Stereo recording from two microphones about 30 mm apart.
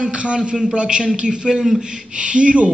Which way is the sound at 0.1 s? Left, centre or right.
Right.